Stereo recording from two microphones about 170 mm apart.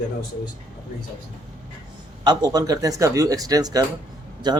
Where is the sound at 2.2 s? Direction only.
25° right (ahead or behind).